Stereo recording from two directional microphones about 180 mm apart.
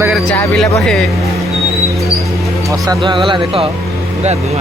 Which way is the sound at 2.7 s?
20° right (ahead or behind).